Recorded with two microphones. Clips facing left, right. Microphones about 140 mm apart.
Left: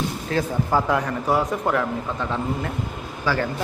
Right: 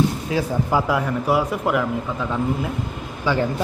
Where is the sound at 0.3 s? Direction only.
10° right (ahead or behind).